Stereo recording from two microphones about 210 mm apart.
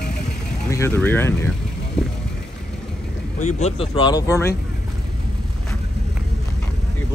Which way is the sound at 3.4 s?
35° left (ahead or behind).